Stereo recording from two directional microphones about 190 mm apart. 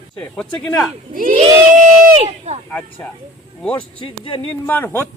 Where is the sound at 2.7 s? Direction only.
10° left (ahead or behind).